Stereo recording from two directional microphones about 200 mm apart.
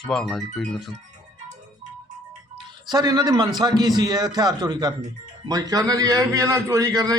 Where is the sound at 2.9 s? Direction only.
20° right (ahead or behind).